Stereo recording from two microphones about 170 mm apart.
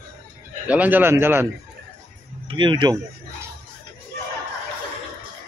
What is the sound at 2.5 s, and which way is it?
Speech, 30° right (ahead or behind).